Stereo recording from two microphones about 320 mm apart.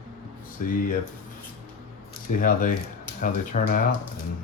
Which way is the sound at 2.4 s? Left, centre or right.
Left.